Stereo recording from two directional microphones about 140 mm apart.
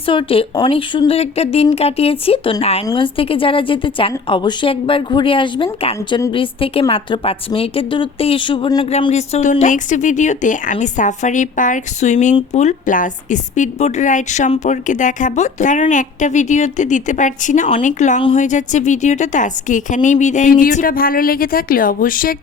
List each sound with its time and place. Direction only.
0.0 s a woman's voice: 40° left (ahead or behind)
2.8 s a woman's voice: 35° left (ahead or behind); by 22.4 s 80° left